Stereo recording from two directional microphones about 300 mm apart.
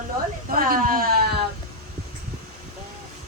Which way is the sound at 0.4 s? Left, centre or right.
Right.